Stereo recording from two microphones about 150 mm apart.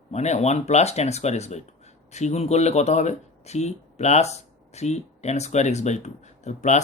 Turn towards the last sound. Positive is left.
turn(degrees=50)  # may be behind; listen again after turning